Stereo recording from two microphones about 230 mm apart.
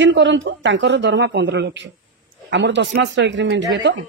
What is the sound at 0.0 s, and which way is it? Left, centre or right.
Speech, right.